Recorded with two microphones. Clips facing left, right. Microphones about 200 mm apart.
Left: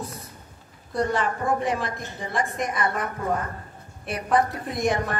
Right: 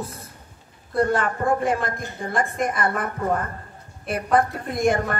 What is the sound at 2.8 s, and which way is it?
Speech, 50° right (ahead or behind).